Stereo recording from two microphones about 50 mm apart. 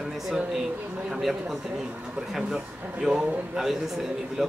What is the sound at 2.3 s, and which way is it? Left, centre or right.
A man's voice, centre.